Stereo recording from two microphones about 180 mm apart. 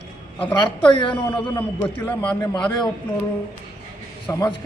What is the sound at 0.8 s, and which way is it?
Speech, 25° left (ahead or behind).